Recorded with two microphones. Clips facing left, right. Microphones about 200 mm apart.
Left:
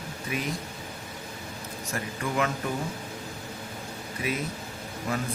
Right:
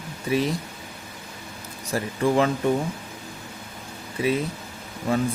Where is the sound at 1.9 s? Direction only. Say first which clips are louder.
Right 9 dB; 30° right (ahead or behind).